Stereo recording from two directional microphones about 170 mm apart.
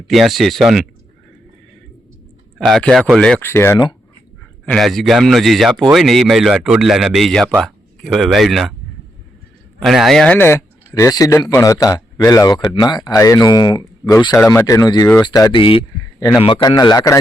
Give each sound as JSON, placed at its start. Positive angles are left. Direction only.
{"t": 0.1, "sound": "speech", "side_deg": 0}
{"t": 2.6, "sound": "speech", "side_deg": 0}
{"t": 4.6, "sound": "speech", "side_deg": 5}
{"t": 9.8, "sound": "speech", "side_deg": 0}